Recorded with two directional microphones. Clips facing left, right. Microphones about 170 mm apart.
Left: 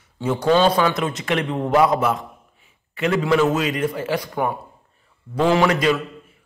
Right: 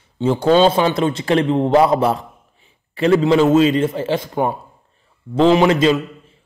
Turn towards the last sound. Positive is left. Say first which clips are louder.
# right 3 dB
turn(degrees=-25)  # may be behind; listen again after turning